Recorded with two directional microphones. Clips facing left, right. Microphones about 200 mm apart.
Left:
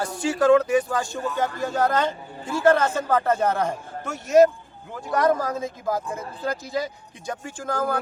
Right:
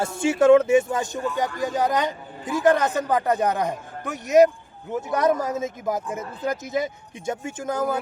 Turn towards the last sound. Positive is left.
turn(degrees=-20)  # may be behind; listen again after turning